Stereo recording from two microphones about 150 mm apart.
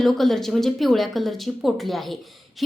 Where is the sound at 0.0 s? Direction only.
Centre (ahead or behind).